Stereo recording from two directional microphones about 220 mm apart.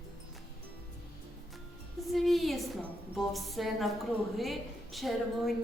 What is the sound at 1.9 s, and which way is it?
A woman's voice, centre (ahead or behind).